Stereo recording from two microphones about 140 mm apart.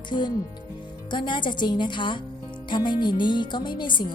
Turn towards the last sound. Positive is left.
turn(degrees=35)  # may be behind; listen again after turning